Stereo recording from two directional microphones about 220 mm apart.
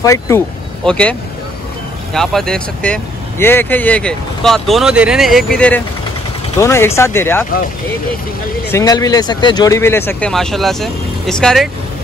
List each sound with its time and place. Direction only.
0.0 s speech: 15° left (ahead or behind)
2.1 s speech: centre (ahead or behind)
6.6 s speech: 10° left (ahead or behind)
8.7 s speech: 15° left (ahead or behind); by 11.7 s centre (ahead or behind)